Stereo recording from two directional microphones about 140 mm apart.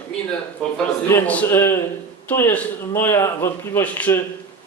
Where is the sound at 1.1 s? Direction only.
15° left (ahead or behind).